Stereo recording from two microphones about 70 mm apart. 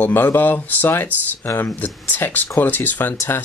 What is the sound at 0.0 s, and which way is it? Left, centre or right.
Speech, left.